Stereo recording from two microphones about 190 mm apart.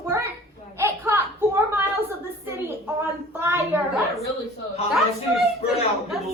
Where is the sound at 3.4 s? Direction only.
10° right (ahead or behind).